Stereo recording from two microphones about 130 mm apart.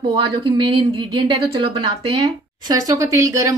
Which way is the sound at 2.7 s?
25° right (ahead or behind).